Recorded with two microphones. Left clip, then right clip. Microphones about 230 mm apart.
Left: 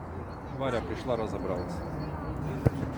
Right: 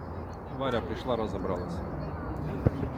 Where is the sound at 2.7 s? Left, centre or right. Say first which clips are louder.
Even; left.